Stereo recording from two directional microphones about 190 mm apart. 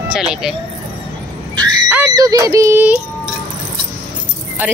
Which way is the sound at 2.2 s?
20° right (ahead or behind).